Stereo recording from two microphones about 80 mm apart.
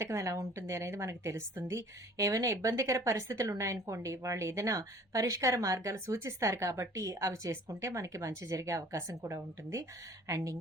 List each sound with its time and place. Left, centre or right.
0.0 s a woman's voice: right